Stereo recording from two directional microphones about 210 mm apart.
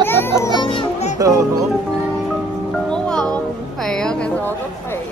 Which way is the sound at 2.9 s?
5° left (ahead or behind).